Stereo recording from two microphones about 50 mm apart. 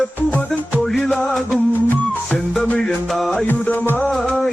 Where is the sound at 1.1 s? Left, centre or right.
Left.